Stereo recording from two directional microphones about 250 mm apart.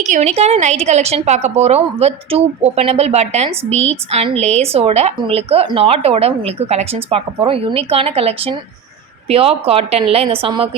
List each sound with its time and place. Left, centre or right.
0.0 s speech: right